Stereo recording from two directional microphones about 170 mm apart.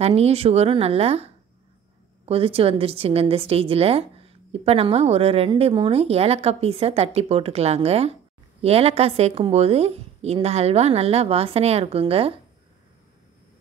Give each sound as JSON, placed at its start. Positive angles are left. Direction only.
{"t": 0.0, "sound": "a woman's voice", "side_deg": -35}